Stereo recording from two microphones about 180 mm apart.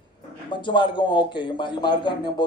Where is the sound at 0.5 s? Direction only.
25° left (ahead or behind).